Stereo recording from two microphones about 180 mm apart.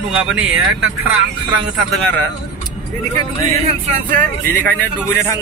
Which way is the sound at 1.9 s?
5° left (ahead or behind).